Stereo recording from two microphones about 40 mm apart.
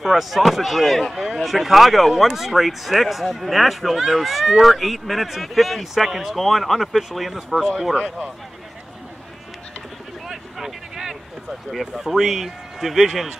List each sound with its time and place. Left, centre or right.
0.0 s speech: centre
7.9 s speech: right
10.2 s a sound: centre
11.9 s a man's voice: centre